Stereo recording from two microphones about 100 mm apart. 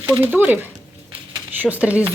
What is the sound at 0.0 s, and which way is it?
Speech, 25° right (ahead or behind).